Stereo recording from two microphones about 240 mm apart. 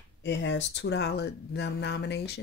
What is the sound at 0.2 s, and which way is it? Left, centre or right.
Speech, left.